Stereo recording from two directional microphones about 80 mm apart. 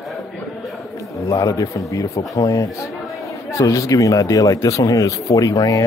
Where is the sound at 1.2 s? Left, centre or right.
Left.